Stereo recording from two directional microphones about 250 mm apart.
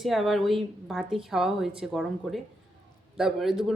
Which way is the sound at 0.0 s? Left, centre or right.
Centre.